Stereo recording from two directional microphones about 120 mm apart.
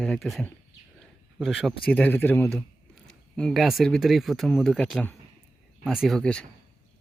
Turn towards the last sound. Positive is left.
turn(degrees=5)  # may be behind; listen again after turning